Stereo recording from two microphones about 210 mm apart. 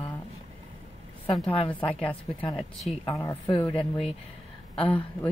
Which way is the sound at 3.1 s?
15° left (ahead or behind).